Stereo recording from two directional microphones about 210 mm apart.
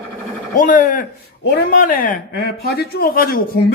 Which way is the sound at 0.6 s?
40° left (ahead or behind).